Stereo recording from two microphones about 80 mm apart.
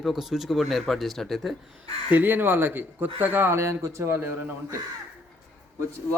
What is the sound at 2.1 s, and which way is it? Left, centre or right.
Speech, right.